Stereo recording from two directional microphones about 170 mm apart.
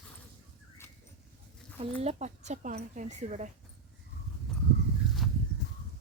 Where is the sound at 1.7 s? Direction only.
40° right (ahead or behind).